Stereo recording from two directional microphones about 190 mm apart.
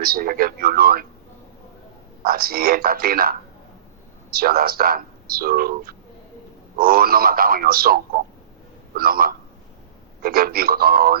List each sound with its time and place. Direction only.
0.0 s speech: 50° right (ahead or behind)
2.2 s speech: 50° right (ahead or behind)